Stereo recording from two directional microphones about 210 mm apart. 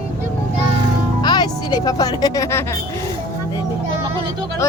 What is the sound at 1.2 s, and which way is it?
Music, 20° left (ahead or behind).